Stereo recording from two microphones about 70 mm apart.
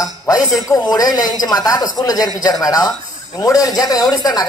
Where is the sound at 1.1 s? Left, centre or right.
Left.